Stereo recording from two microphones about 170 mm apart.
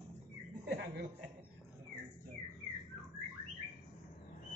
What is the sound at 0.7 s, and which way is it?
Chuckle, 80° right.